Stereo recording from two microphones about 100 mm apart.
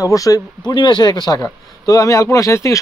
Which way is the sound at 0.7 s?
50° left (ahead or behind).